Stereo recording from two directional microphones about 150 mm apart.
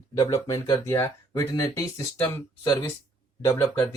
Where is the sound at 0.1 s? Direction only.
25° left (ahead or behind).